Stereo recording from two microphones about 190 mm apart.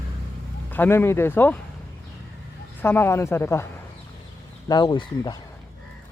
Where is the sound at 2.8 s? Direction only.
10° left (ahead or behind).